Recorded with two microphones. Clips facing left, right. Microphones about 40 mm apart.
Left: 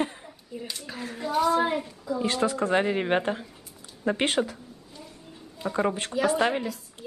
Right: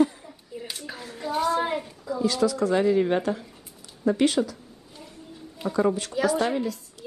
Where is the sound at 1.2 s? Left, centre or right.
Centre.